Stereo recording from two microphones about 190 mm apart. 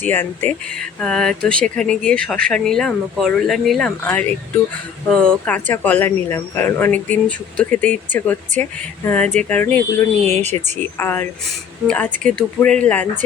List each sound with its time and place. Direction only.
0.0 s speech: 10° left (ahead or behind)
10.2 s speech: 35° right (ahead or behind)
10.8 s speech: 10° left (ahead or behind)